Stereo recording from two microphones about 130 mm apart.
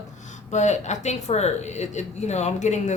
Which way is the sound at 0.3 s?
65° left (ahead or behind).